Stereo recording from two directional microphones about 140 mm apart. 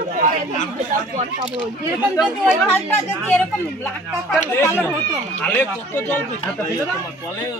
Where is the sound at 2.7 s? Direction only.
15° left (ahead or behind).